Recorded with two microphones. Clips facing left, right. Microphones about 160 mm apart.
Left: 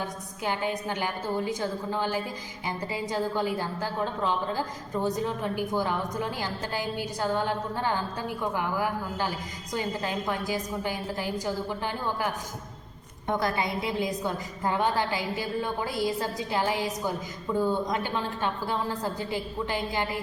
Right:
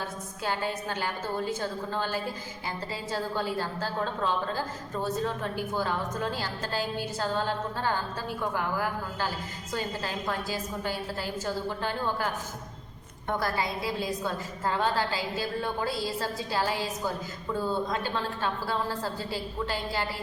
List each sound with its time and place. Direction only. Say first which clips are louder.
0.0 s a woman's voice: left 2 dB; 15° left (ahead or behind)